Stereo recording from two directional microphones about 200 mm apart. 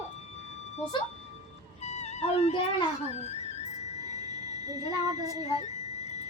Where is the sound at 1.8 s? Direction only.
35° left (ahead or behind).